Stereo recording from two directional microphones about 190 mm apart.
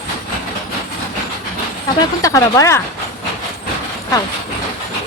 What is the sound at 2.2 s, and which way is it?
Speech, 15° left (ahead or behind).